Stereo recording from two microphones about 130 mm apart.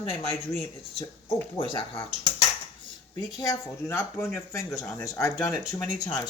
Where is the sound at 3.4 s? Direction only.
25° left (ahead or behind).